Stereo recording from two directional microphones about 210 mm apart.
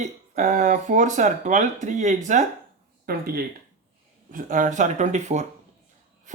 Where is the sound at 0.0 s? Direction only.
35° right (ahead or behind).